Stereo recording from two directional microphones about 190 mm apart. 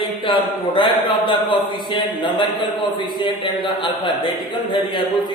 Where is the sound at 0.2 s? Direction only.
25° left (ahead or behind).